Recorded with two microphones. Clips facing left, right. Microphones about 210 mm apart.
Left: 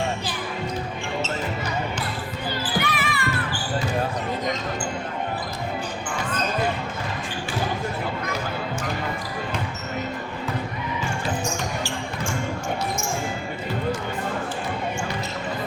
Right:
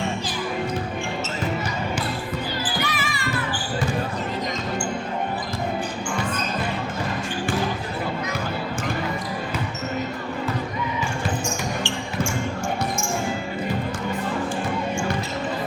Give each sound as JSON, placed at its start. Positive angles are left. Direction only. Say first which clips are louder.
{"t": 2.8, "sound": "basketball bounce", "louder": "left 1 dB", "side_deg": 60}